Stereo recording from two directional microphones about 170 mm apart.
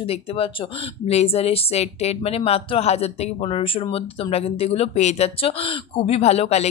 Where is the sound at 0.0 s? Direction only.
35° left (ahead or behind).